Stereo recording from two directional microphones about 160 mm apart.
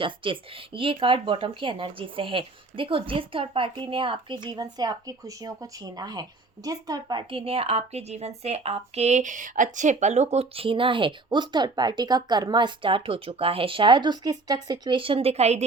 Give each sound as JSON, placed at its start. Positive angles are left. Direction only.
{"t": 0.0, "sound": "speech", "side_deg": -30}
{"t": 10.3, "sound": "speech", "side_deg": -35}